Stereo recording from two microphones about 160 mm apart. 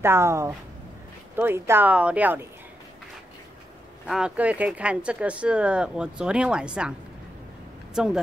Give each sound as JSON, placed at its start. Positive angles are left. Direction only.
{"t": 0.0, "sound": "speech", "side_deg": -15}
{"t": 4.1, "sound": "speech", "side_deg": -5}
{"t": 7.9, "sound": "speech", "side_deg": -5}